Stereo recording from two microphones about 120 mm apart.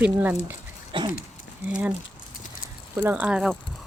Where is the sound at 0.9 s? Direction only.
40° right (ahead or behind).